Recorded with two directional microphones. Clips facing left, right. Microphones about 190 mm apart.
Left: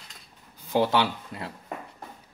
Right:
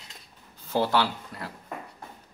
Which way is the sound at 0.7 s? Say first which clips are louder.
Left 2 dB; 20° left (ahead or behind).